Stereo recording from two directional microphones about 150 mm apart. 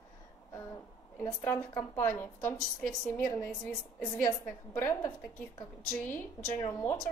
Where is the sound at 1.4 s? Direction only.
15° left (ahead or behind).